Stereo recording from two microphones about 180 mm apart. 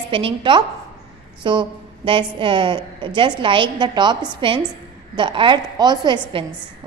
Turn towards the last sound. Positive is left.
turn(degrees=-25)  # may be behind; listen again after turning